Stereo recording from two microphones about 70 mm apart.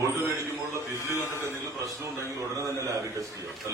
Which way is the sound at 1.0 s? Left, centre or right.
Left.